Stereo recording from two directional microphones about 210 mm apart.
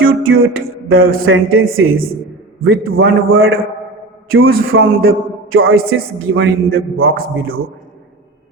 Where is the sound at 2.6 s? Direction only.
45° right (ahead or behind).